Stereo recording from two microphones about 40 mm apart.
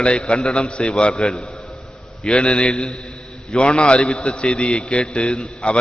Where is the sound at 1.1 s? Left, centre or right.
Centre.